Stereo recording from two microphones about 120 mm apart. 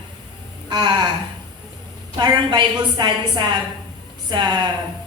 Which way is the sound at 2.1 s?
35° right (ahead or behind).